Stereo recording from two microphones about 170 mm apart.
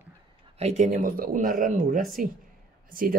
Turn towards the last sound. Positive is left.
turn(degrees=-55)  # may be behind; listen again after turning